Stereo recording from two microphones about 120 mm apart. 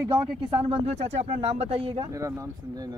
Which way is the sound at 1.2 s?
60° right (ahead or behind).